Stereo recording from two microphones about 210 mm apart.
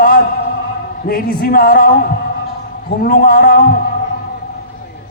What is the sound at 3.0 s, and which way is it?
Speech, 45° left (ahead or behind).